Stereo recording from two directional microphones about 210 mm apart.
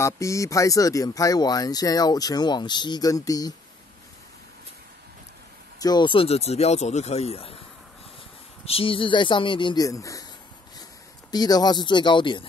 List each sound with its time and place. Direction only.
0.0 s speech: 15° left (ahead or behind)
5.8 s speech: 20° left (ahead or behind)
8.6 s speech: 25° left (ahead or behind)
11.3 s speech: 20° left (ahead or behind)